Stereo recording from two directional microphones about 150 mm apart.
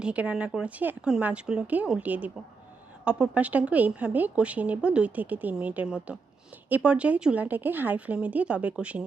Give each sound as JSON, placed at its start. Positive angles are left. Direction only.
{"t": 0.0, "sound": "a woman's voice", "side_deg": -10}